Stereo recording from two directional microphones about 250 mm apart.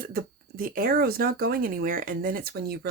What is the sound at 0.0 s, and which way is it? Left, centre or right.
Speech, right.